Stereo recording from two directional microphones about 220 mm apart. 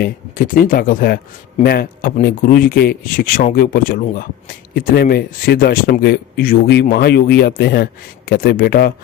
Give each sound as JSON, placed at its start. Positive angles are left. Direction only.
{"t": 0.0, "sound": "speech", "side_deg": 40}